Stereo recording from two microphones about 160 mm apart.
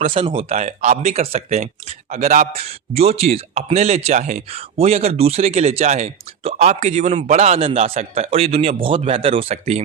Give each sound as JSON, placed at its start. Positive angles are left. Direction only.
{"t": 0.0, "sound": "a man's voice", "side_deg": -35}